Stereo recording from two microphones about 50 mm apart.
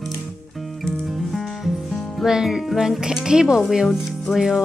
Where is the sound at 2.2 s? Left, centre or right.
Centre.